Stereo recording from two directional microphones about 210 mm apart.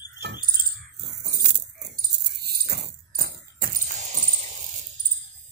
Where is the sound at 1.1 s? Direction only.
50° right (ahead or behind).